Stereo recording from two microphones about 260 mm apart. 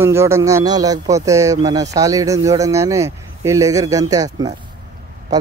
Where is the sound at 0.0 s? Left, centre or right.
Centre.